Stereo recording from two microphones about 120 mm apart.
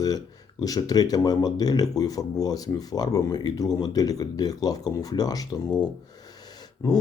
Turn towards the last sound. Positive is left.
turn(degrees=35)  # may be behind; listen again after turning